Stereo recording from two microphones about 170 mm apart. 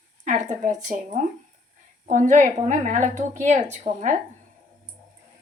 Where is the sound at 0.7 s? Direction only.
45° right (ahead or behind).